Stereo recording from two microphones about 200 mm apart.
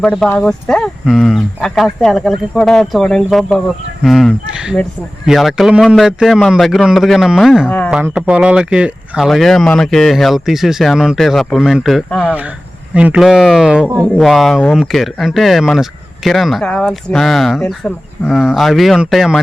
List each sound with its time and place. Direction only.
0.0 s speech: 5° left (ahead or behind)